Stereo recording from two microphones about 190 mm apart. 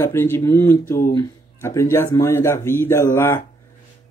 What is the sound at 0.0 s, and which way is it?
Speech, 15° left (ahead or behind).